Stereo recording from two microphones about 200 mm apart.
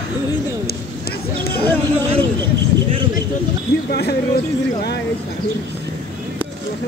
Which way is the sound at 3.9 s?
50° left (ahead or behind).